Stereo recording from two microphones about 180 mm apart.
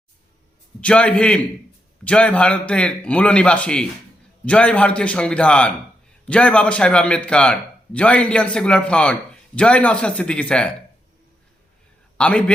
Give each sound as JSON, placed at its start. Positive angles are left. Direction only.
{"t": 0.8, "sound": "a man's voice", "side_deg": 5}
{"t": 12.1, "sound": "a man's voice", "side_deg": 5}